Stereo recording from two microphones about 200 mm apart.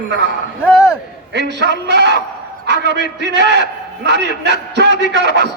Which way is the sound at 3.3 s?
60° right (ahead or behind).